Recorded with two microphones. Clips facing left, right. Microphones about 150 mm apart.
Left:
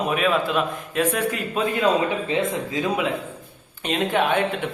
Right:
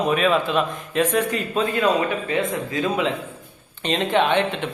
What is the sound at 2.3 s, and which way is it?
Speech, 20° left (ahead or behind).